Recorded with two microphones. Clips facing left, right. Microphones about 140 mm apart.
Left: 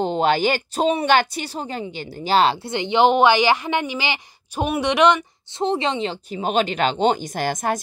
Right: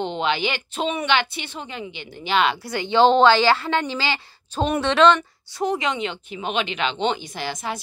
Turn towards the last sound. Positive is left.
turn(degrees=45)  # may be behind; listen again after turning